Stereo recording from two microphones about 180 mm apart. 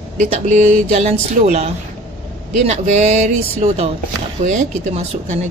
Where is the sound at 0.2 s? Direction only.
40° right (ahead or behind).